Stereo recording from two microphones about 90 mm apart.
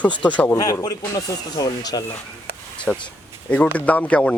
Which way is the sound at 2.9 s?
20° left (ahead or behind).